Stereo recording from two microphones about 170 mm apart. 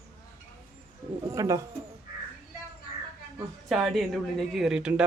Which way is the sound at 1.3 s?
20° right (ahead or behind).